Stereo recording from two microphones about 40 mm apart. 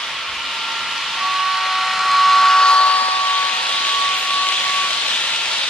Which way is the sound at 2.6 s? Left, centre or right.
Left.